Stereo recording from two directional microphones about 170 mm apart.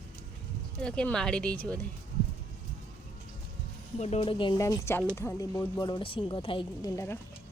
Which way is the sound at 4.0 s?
40° left (ahead or behind).